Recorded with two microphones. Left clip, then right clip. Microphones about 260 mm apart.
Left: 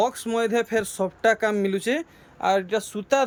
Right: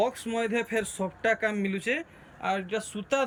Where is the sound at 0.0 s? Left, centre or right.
Centre.